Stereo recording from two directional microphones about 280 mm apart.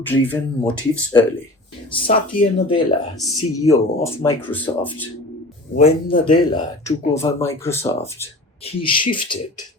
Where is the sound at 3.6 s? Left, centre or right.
Centre.